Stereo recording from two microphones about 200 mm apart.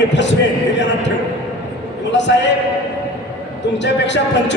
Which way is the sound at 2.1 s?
65° left (ahead or behind).